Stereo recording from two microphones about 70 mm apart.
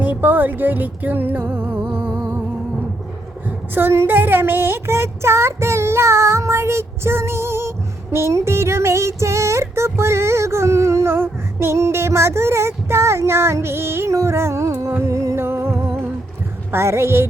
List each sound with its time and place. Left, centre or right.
0.0 s music: right
3.8 s speech: right
8.1 s child singing: right
15.4 s music: right
16.7 s speech: right